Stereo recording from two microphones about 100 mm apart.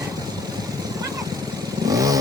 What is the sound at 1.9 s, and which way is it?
Vehicle, 35° right (ahead or behind).